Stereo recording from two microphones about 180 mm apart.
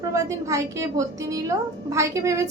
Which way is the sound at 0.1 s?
15° right (ahead or behind).